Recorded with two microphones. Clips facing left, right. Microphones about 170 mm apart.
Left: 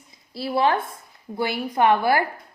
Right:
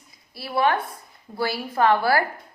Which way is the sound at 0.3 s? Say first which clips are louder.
Left 1 dB; 25° left (ahead or behind).